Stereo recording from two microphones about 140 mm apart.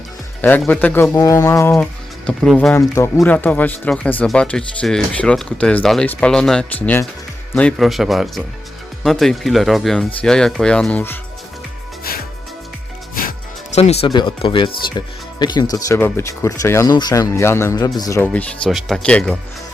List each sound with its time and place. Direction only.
0.7 s speech: 10° left (ahead or behind)
1.1 s speech: 25° left (ahead or behind)
1.7 s speech: 5° left (ahead or behind)
2.7 s speech: 20° left (ahead or behind)
13.7 s speech: 50° left (ahead or behind)
14.1 s speech: 35° left (ahead or behind)
16.0 s speech: 15° left (ahead or behind)
18.2 s speech: 10° left (ahead or behind)